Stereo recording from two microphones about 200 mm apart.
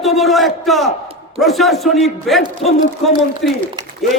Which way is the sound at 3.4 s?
Centre (ahead or behind).